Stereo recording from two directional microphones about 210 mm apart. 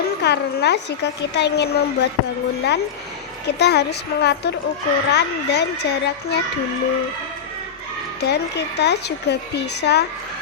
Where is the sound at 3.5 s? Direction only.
50° left (ahead or behind).